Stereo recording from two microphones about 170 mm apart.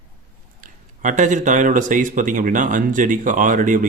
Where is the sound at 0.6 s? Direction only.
50° right (ahead or behind).